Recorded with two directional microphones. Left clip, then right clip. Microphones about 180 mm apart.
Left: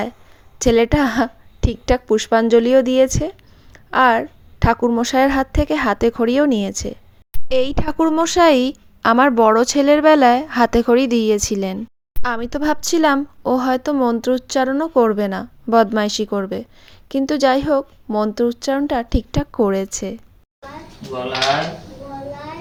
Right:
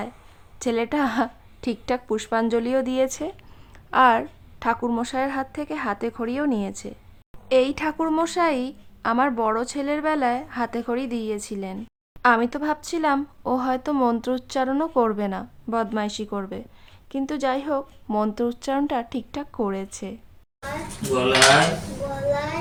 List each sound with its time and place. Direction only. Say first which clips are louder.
0.6 s a woman's voice: left 9 dB; 25° left (ahead or behind)